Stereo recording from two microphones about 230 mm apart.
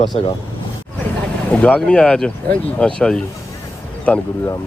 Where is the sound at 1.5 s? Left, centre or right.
Centre.